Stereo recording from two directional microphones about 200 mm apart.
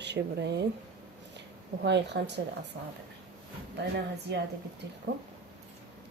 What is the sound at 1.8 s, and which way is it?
Speech, 60° right (ahead or behind).